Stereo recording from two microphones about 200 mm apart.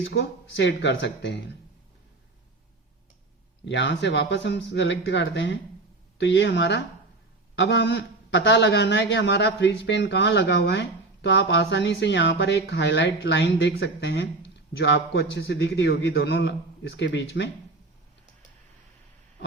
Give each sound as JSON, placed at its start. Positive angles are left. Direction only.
{"t": 0.1, "sound": "a man's voice", "side_deg": 60}
{"t": 3.7, "sound": "a man's voice", "side_deg": 65}